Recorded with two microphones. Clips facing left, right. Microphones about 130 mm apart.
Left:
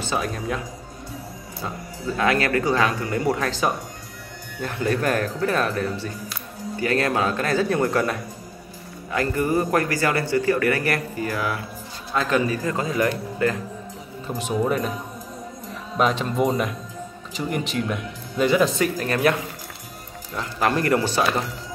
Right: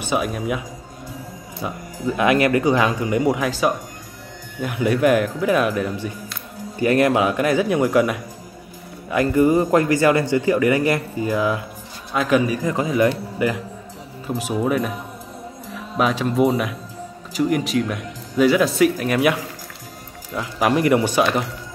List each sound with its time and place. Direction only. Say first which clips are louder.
0.0 s speech: right 4 dB; 10° right (ahead or behind)
2.0 s a man's voice: right 4 dB; 15° right (ahead or behind)
20.3 s speech: right 3 dB; 10° right (ahead or behind)